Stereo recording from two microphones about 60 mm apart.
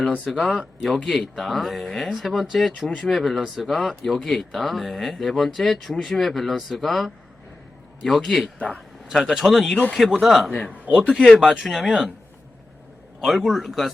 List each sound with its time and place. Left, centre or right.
0.3 s speech: centre
8.5 s speech: left
9.3 s speech: centre
13.2 s speech: centre